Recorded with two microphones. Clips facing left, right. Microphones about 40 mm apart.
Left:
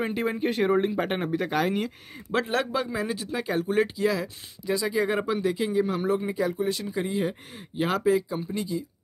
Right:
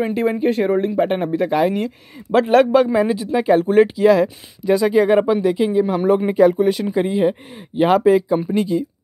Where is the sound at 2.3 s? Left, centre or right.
Right.